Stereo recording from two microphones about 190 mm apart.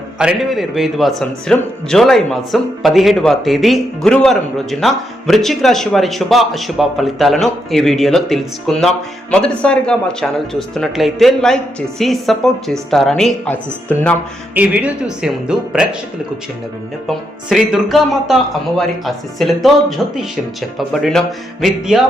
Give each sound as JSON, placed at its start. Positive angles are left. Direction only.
{"t": 0.2, "sound": "a man's voice", "side_deg": -5}
{"t": 14.5, "sound": "a man's voice", "side_deg": -10}
{"t": 17.1, "sound": "a man's voice", "side_deg": 0}